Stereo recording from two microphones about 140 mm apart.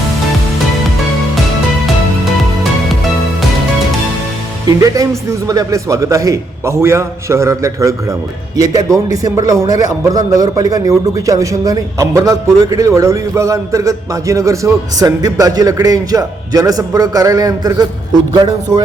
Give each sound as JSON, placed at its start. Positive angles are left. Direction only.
{"t": 4.8, "sound": "a man's voice", "side_deg": -25}